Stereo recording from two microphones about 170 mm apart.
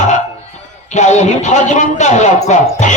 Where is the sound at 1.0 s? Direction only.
45° left (ahead or behind).